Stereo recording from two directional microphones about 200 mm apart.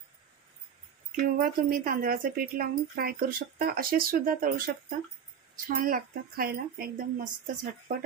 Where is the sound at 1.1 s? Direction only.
45° right (ahead or behind).